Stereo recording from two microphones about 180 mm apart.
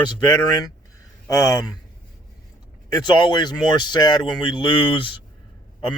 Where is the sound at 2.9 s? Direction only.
25° left (ahead or behind).